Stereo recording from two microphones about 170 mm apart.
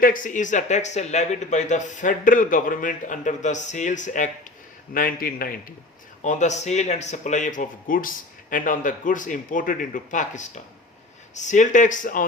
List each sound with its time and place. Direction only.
0.0 s speech: 50° left (ahead or behind)
4.9 s a man's voice: 55° left (ahead or behind)
6.2 s speech: 45° left (ahead or behind)